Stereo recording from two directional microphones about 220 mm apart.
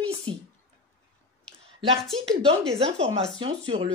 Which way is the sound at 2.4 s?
30° right (ahead or behind).